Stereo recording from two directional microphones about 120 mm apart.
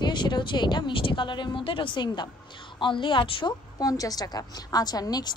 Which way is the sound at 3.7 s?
30° left (ahead or behind).